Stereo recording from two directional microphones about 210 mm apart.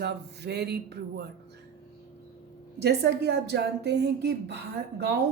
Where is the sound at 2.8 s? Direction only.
50° right (ahead or behind).